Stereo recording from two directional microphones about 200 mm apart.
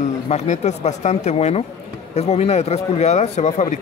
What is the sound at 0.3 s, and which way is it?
A man's voice, 35° left (ahead or behind).